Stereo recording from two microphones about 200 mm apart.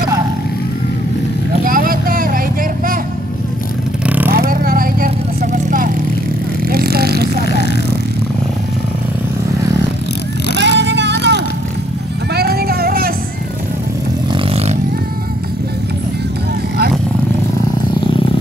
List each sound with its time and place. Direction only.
1.7 s vehicle: 45° right (ahead or behind)
4.0 s vehicle: 5° right (ahead or behind)
4.3 s vehicle: 45° right (ahead or behind)
10.6 s vehicle: 60° right (ahead or behind)
12.4 s music: 50° right (ahead or behind)
14.3 s a sound: 30° right (ahead or behind)